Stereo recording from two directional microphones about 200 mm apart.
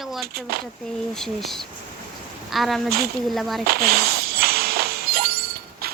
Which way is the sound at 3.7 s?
50° right (ahead or behind).